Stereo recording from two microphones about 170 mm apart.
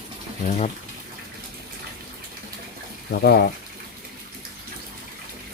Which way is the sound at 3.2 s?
65° left (ahead or behind).